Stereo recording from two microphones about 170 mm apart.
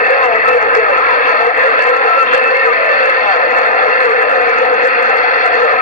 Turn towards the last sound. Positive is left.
turn(degrees=50)  # may be behind; listen again after turning